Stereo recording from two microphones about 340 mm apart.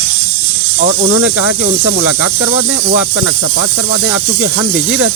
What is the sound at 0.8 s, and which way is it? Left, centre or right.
Speech, right.